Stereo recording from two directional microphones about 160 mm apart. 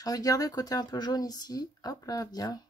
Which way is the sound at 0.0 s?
20° left (ahead or behind).